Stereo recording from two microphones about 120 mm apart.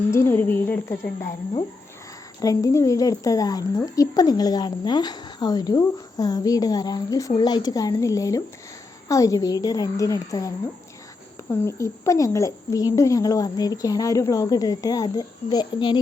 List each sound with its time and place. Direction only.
0.1 s speech: 20° left (ahead or behind)
2.4 s speech: 30° left (ahead or behind)
11.6 s speech: 25° left (ahead or behind)